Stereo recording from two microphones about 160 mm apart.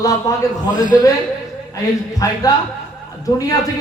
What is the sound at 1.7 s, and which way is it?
A man's voice, 20° left (ahead or behind).